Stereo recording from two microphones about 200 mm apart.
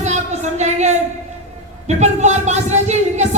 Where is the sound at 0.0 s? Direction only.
35° right (ahead or behind).